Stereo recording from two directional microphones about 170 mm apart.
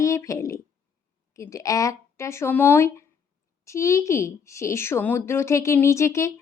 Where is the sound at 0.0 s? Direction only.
20° left (ahead or behind).